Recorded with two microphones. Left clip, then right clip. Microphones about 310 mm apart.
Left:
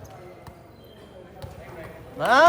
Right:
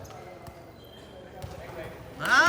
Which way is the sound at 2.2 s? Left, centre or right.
Centre.